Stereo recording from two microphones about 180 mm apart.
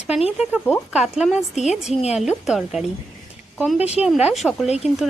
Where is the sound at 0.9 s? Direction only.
5° right (ahead or behind).